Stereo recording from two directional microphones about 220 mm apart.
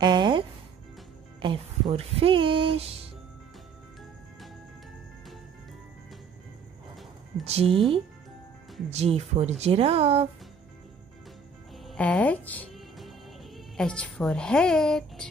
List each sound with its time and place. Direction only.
0.0 s music: 20° right (ahead or behind)
1.4 s speech: 25° right (ahead or behind)
7.4 s speech: 25° right (ahead or behind)
8.9 s speech: 30° right (ahead or behind)
11.8 s music: centre (ahead or behind)